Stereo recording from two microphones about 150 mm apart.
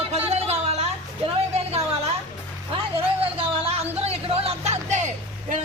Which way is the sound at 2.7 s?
40° right (ahead or behind).